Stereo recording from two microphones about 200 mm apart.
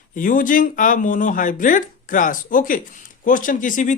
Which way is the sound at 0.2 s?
40° left (ahead or behind).